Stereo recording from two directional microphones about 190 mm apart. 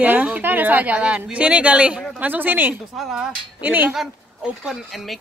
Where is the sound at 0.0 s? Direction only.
10° right (ahead or behind).